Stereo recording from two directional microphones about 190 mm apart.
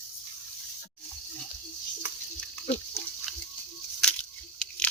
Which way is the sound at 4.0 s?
5° left (ahead or behind).